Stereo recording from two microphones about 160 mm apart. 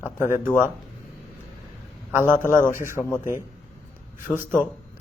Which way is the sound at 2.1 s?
15° right (ahead or behind).